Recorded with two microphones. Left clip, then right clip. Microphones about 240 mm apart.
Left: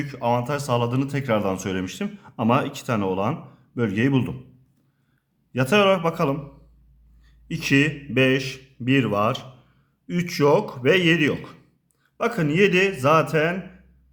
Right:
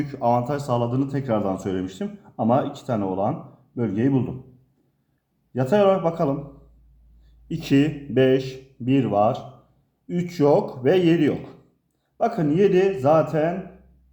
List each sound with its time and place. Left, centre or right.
0.1 s speech: centre
5.5 s speech: left
7.5 s speech: left